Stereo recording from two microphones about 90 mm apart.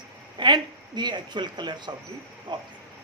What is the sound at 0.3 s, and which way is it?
Speech, 55° right (ahead or behind).